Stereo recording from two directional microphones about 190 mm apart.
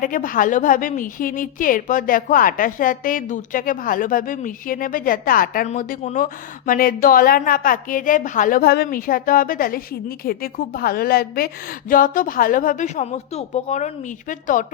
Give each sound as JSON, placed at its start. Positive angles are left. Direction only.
{"t": 0.0, "sound": "a woman's voice", "side_deg": 45}